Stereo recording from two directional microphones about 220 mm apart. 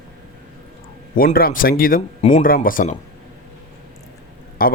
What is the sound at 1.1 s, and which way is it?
Speech, 40° left (ahead or behind).